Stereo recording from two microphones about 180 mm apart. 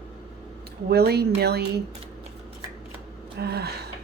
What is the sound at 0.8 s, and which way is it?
Speech, 60° right (ahead or behind).